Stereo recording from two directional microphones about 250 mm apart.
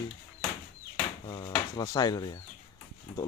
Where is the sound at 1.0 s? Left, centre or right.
Centre.